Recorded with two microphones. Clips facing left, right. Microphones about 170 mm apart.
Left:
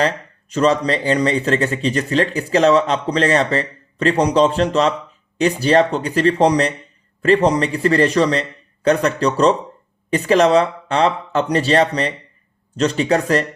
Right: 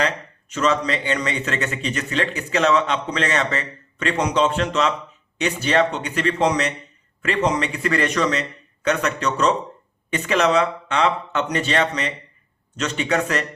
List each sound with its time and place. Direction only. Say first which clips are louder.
0.5 s speech: left 5 dB; 35° left (ahead or behind)